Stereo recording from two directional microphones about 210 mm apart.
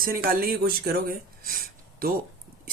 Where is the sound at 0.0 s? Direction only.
45° right (ahead or behind).